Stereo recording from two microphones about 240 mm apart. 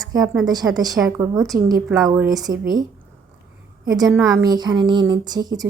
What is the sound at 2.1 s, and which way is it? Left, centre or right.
Speech, centre.